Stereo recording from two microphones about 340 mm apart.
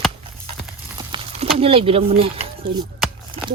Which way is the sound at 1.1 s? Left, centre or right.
Centre.